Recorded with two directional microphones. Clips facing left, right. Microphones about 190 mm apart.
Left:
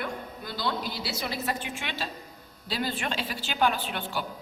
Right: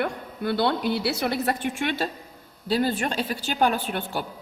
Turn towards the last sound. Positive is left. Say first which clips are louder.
# right 4 dB
turn(degrees=-50)  # may be behind; listen again after turning